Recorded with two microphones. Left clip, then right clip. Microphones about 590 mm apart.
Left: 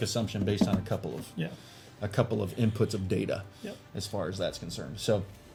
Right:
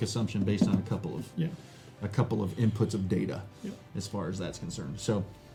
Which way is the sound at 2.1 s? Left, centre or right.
Left.